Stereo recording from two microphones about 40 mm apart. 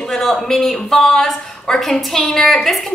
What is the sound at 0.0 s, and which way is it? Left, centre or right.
A woman's voice, centre.